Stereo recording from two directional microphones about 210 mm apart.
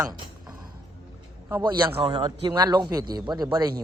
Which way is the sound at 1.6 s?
25° right (ahead or behind).